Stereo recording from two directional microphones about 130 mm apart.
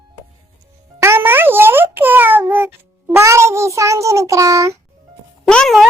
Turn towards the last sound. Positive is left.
turn(degrees=5)  # may be behind; listen again after turning